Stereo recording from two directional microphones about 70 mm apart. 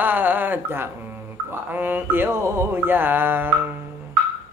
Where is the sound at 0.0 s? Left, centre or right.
Right.